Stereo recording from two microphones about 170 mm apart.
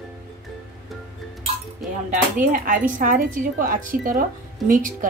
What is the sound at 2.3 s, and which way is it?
A woman's voice, 50° right (ahead or behind).